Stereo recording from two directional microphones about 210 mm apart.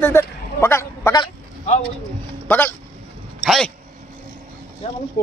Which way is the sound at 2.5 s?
10° left (ahead or behind).